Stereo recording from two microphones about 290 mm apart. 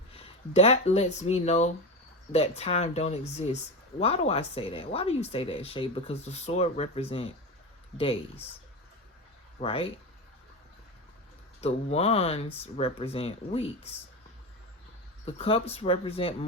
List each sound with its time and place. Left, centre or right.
0.1 s speech: left
9.6 s speech: centre
11.6 s speech: left
15.3 s speech: centre